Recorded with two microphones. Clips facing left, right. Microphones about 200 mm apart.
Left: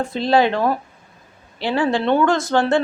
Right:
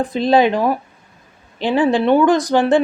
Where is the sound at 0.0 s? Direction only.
15° right (ahead or behind).